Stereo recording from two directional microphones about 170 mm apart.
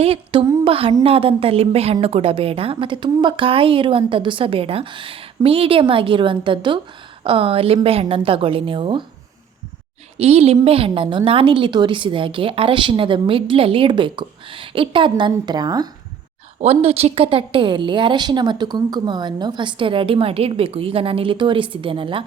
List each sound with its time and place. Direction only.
0.0 s a woman's voice: 30° right (ahead or behind)
10.2 s a woman's voice: 35° right (ahead or behind)
16.6 s a woman's voice: 35° right (ahead or behind)